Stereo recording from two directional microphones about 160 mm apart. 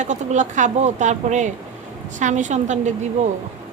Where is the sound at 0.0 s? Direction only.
50° right (ahead or behind).